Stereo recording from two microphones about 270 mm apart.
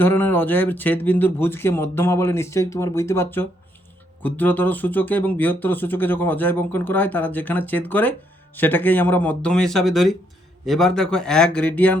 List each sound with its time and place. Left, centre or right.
0.0 s speech: centre